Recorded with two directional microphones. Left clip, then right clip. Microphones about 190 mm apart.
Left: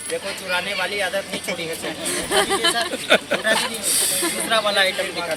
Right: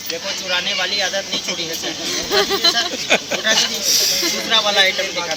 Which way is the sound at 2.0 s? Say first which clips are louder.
Right 2 dB; 65° left (ahead or behind).